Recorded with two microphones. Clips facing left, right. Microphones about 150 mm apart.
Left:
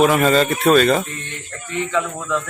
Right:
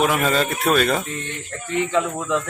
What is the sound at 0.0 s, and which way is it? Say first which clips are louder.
Speech: left 5 dB; centre (ahead or behind).